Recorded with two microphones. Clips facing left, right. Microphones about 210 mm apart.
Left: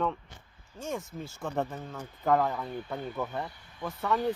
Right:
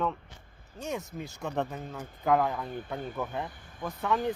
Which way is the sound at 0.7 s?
20° right (ahead or behind).